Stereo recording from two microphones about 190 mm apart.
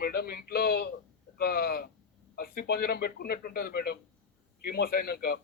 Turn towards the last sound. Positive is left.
turn(degrees=55)  # may be behind; listen again after turning